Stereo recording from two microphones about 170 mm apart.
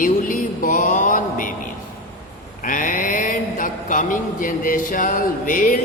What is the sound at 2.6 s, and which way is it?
Mantra, 50° left (ahead or behind).